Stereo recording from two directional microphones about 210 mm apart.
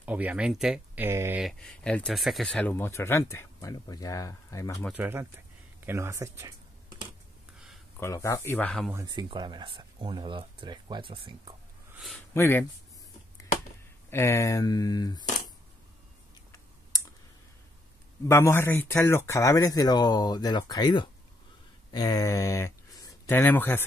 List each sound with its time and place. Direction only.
0.0 s speech: 5° right (ahead or behind)
1.4 s speech: 5° left (ahead or behind)
4.9 s speech: 10° right (ahead or behind)
5.9 s computer keyboard: 15° right (ahead or behind)
8.0 s speech: 15° left (ahead or behind)
8.9 s speech: 20° right (ahead or behind)
12.4 s speech: 10° left (ahead or behind)
14.1 s speech: 15° left (ahead or behind)
18.3 s speech: 10° left (ahead or behind)